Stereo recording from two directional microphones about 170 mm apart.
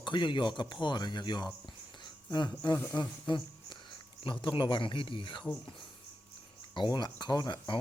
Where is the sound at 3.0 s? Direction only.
25° left (ahead or behind).